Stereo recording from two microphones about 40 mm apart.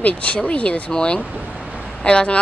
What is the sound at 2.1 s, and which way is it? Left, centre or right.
Speech, left.